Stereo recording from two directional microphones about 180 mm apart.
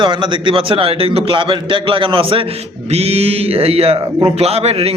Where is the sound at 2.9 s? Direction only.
35° right (ahead or behind).